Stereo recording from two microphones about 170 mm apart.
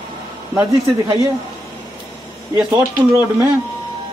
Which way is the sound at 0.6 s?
15° right (ahead or behind).